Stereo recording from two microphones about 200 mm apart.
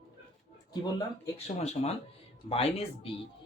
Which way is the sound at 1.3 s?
30° left (ahead or behind).